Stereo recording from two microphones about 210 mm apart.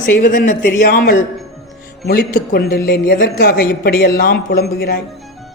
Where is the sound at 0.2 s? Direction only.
40° left (ahead or behind).